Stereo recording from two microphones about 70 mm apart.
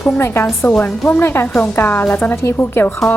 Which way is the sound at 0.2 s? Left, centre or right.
Left.